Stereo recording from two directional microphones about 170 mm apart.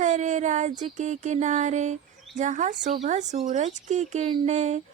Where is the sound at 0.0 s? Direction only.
45° right (ahead or behind).